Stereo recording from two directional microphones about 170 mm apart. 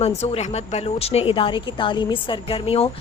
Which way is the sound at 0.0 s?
40° left (ahead or behind).